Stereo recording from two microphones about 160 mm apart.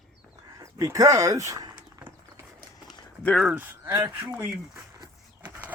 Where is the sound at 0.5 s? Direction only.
20° right (ahead or behind).